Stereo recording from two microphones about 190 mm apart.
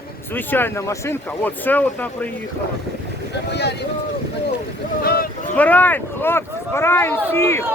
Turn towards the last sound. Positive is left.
turn(degrees=10)  # may be behind; listen again after turning